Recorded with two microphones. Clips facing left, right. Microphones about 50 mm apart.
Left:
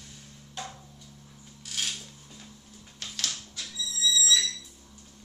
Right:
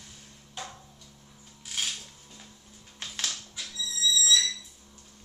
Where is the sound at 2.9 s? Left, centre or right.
Right.